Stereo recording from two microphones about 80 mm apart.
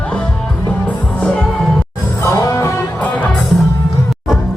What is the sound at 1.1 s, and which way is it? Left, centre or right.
Music, centre.